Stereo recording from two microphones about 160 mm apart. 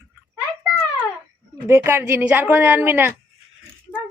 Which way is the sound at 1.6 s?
15° right (ahead or behind).